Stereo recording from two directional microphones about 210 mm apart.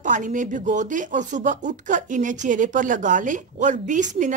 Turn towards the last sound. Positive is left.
turn(degrees=-35)  # may be behind; listen again after turning